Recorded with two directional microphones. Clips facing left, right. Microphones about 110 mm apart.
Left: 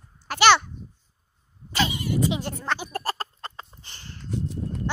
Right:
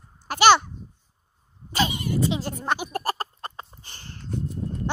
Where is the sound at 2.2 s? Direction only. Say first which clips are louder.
Even; 15° left (ahead or behind).